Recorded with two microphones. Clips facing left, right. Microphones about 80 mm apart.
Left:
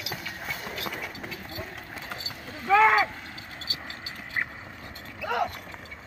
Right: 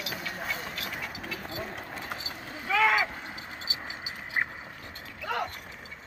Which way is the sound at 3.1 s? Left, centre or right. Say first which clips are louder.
Right 1 dB; right.